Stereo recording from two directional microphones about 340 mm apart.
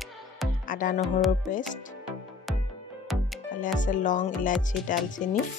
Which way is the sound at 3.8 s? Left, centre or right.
Left.